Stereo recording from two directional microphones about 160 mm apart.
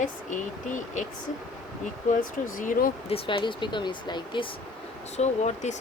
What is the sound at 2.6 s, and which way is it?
Speech, 55° left (ahead or behind).